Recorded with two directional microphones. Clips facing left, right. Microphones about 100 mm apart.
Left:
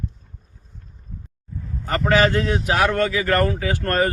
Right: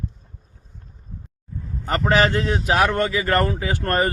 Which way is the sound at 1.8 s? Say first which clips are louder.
Left 1 dB; 25° right (ahead or behind).